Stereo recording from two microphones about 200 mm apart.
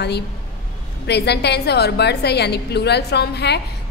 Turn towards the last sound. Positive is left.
turn(degrees=55)  # may be behind; listen again after turning